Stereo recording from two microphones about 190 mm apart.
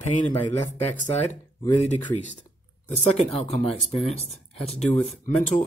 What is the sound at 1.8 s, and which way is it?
Speech, 40° left (ahead or behind).